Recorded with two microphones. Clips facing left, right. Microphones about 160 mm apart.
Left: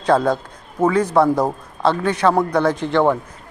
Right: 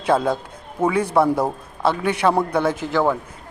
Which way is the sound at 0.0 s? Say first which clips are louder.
Left 2 dB; 5° right (ahead or behind).